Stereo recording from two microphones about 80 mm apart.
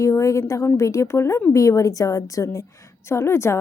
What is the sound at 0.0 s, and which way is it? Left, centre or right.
A woman's voice, left.